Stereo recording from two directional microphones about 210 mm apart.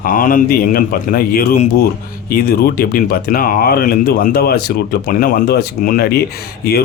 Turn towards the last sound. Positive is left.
turn(degrees=45)  # may be behind; listen again after turning